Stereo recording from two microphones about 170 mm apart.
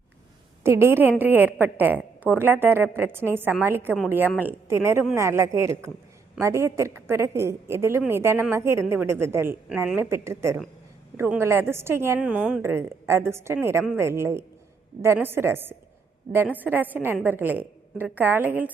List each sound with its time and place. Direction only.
0.6 s a woman's voice: 15° right (ahead or behind)